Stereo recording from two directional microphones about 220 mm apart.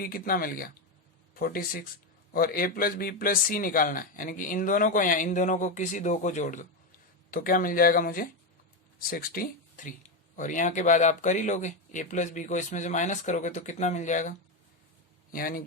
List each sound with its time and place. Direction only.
0.0 s speech: 40° left (ahead or behind)